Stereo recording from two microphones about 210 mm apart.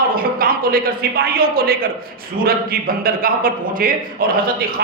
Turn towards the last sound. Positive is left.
turn(degrees=-45)  # may be behind; listen again after turning